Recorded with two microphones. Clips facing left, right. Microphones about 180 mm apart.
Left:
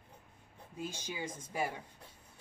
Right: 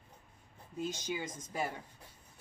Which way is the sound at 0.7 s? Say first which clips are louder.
Right 4 dB; 10° left (ahead or behind).